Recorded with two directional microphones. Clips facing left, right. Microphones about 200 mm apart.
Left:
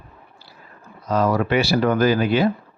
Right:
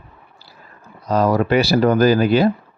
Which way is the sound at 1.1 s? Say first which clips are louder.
Right 3 dB; 35° right (ahead or behind).